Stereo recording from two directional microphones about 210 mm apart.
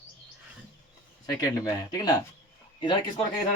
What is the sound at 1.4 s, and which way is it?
Speech, 15° left (ahead or behind).